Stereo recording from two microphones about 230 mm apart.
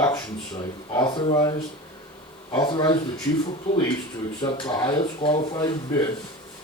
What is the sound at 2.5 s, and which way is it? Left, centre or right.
Speech, centre.